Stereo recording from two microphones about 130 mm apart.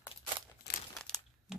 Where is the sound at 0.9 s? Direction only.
Centre (ahead or behind).